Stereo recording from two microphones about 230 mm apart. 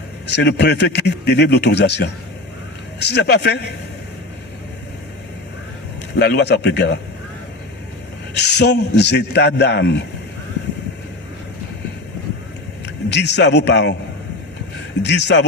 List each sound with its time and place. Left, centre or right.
0.3 s a man's voice: left
6.1 s a man's voice: left
8.4 s a man's voice: left
12.8 s a man's voice: left
15.0 s a man's voice: left